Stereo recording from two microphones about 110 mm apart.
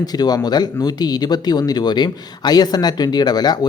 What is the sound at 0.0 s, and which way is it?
Speech, 35° left (ahead or behind).